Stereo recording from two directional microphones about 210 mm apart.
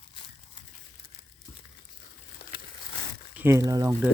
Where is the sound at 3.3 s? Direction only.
10° right (ahead or behind).